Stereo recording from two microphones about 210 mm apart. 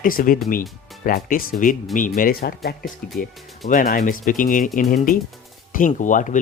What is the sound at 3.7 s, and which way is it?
Speech, 40° left (ahead or behind).